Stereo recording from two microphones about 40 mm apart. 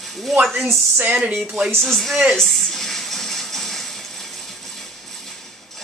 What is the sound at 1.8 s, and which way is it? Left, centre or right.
Speech, centre.